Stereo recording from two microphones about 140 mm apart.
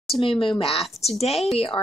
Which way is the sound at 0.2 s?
40° left (ahead or behind).